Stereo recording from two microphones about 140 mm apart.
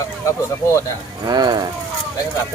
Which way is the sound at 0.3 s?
20° left (ahead or behind).